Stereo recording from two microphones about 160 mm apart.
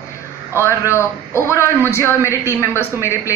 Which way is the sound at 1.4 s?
15° left (ahead or behind).